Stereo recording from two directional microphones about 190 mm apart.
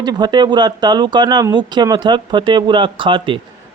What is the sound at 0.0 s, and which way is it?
Speech, 20° right (ahead or behind).